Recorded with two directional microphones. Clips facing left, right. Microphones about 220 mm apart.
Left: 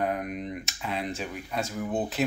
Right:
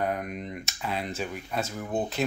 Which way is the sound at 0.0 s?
Centre (ahead or behind).